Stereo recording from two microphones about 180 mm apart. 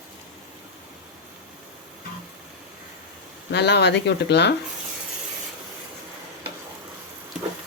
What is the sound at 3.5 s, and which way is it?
Speech, 70° left (ahead or behind).